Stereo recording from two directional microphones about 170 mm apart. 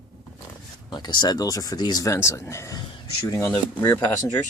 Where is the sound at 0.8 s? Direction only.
25° left (ahead or behind).